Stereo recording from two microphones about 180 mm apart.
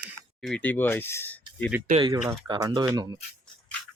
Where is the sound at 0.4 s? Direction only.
5° left (ahead or behind).